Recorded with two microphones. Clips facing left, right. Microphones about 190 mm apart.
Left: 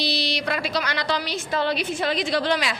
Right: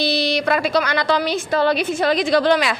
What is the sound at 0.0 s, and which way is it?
A woman's voice, 50° right (ahead or behind).